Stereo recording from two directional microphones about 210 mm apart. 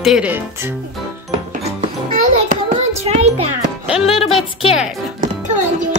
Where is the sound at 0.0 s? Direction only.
5° right (ahead or behind).